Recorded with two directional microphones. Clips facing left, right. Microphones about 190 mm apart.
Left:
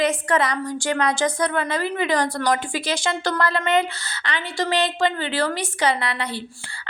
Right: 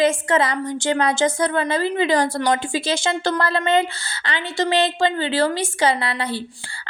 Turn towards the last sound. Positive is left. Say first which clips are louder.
# right 2 dB
turn(degrees=-30)  # may be behind; listen again after turning